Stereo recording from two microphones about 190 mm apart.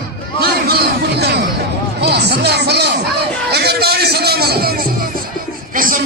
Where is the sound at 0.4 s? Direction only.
55° right (ahead or behind).